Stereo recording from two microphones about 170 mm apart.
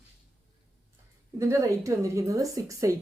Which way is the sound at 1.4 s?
15° right (ahead or behind).